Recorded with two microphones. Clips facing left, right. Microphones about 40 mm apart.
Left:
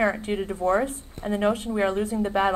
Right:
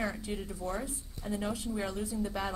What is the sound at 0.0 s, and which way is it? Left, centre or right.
A woman's voice, left.